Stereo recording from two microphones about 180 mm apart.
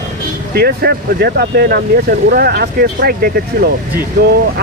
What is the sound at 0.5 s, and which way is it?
Speech, 60° right (ahead or behind).